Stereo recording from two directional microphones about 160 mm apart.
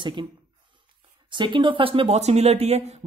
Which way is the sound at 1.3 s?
30° right (ahead or behind).